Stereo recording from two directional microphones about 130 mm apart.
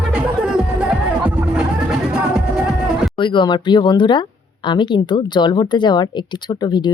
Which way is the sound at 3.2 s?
35° left (ahead or behind).